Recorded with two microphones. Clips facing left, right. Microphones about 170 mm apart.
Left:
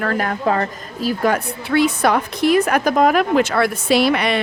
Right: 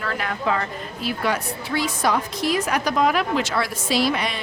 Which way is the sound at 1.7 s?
60° left (ahead or behind).